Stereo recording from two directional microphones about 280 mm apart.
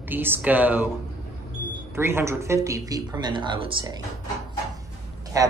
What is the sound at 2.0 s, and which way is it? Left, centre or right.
Speech, centre.